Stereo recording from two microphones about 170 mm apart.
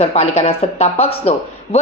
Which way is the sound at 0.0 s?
40° left (ahead or behind).